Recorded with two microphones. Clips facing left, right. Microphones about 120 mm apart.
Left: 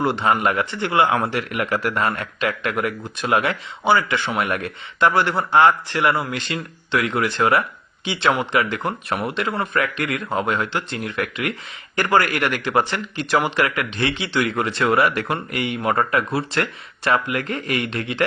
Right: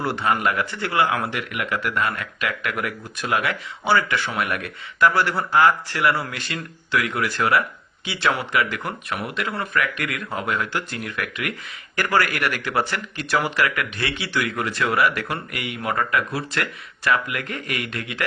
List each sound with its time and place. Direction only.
0.0 s speech: 20° left (ahead or behind)